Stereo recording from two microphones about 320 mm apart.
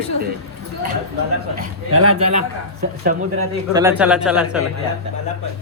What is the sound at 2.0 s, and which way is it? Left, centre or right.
Speech, right.